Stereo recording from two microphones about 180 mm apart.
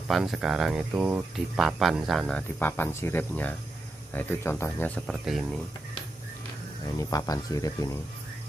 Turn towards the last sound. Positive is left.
turn(degrees=20)  # may be behind; listen again after turning